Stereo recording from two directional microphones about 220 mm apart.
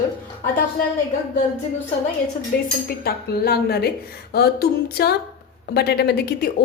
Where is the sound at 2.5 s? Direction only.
40° left (ahead or behind).